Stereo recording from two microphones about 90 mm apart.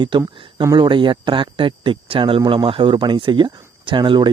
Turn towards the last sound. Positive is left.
turn(degrees=-60)  # may be behind; listen again after turning